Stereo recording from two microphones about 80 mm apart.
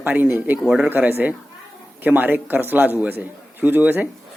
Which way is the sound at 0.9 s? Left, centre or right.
Right.